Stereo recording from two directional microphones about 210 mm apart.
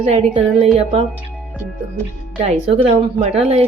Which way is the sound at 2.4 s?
25° right (ahead or behind).